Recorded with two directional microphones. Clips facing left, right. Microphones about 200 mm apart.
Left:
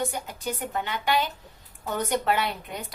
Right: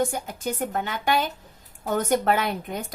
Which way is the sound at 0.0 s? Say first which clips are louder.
Right 4 dB; 45° right (ahead or behind).